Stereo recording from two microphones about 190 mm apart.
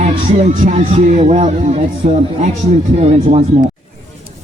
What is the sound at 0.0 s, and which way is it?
Speech, 35° right (ahead or behind).